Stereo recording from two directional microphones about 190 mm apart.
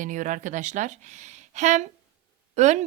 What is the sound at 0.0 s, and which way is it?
A woman's voice, 40° right (ahead or behind).